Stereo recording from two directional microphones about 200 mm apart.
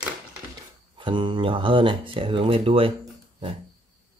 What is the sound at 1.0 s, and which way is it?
Speech, 25° right (ahead or behind).